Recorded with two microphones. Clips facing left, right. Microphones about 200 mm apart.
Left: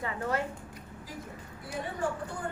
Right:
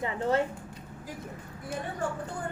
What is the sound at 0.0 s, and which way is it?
Speech, 25° right (ahead or behind).